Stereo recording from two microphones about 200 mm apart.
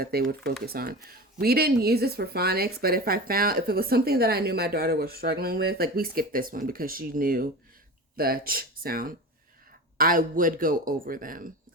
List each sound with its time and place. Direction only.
0.0 s speech: 50° right (ahead or behind)